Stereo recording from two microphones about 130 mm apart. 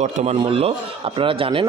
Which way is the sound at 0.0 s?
55° right (ahead or behind).